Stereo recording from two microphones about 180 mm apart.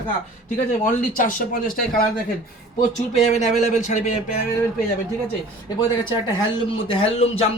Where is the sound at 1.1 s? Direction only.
50° left (ahead or behind).